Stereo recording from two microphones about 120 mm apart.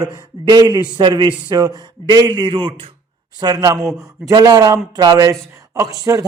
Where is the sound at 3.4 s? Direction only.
30° right (ahead or behind).